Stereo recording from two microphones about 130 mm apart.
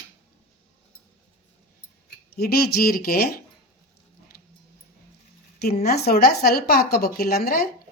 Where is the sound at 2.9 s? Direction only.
90° left.